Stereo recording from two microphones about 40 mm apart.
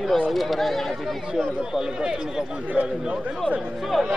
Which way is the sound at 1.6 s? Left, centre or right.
Centre.